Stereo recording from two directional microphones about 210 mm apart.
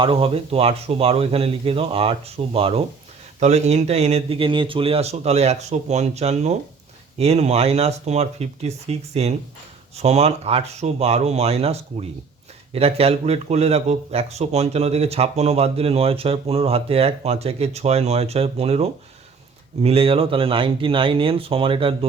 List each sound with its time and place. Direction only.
0.0 s speech: 25° right (ahead or behind)